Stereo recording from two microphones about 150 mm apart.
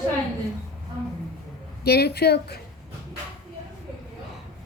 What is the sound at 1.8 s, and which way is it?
Speech, 90° left.